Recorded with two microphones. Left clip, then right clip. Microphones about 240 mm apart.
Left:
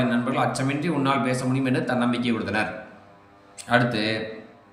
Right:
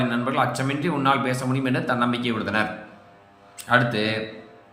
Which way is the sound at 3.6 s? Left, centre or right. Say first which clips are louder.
Right 1 dB; centre.